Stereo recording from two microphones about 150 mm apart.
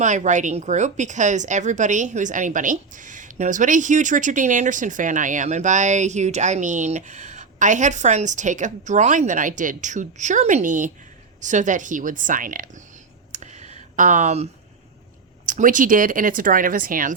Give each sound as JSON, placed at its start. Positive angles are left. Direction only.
{"t": 0.0, "sound": "speech", "side_deg": -55}
{"t": 13.3, "sound": "a sound", "side_deg": -50}
{"t": 15.4, "sound": "speech", "side_deg": -60}